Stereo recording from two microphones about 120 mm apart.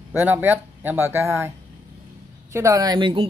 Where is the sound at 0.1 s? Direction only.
15° right (ahead or behind).